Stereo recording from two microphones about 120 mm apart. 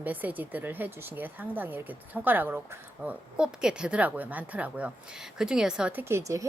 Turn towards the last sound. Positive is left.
turn(degrees=-25)  # may be behind; listen again after turning